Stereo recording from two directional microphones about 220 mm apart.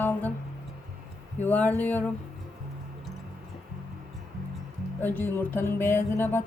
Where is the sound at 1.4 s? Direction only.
10° left (ahead or behind).